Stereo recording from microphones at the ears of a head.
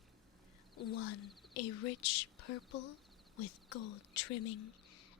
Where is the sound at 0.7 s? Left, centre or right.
Left.